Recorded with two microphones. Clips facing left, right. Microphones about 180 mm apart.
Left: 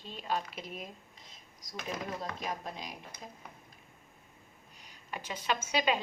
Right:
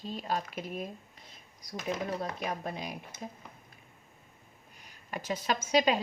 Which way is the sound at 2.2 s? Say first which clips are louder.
Right 3 dB; 60° right (ahead or behind).